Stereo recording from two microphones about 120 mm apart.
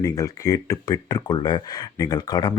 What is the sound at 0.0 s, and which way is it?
Speech, 30° left (ahead or behind).